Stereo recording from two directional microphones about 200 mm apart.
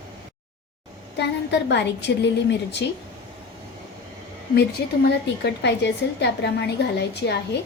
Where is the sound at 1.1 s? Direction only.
60° left (ahead or behind).